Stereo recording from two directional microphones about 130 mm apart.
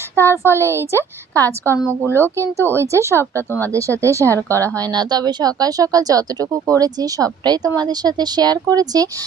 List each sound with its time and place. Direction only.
0.2 s speech: 20° right (ahead or behind)
3.3 s speech: 15° left (ahead or behind)
3.7 s speech: 25° right (ahead or behind)